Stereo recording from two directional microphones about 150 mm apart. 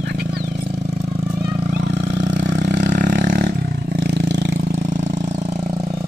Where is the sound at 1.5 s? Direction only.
50° right (ahead or behind); by 4.0 s 85° right.